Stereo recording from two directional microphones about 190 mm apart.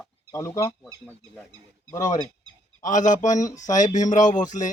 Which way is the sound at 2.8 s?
40° left (ahead or behind).